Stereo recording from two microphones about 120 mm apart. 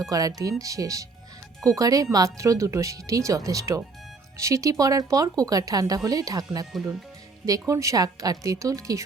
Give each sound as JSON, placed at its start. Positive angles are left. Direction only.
{"t": 0.1, "sound": "speech", "side_deg": -30}
{"t": 7.7, "sound": "speech", "side_deg": -25}